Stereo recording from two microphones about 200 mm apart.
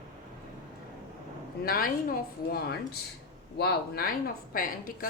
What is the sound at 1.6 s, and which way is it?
A woman's voice, 45° left (ahead or behind).